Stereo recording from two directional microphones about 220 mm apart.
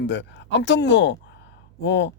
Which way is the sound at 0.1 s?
55° left (ahead or behind).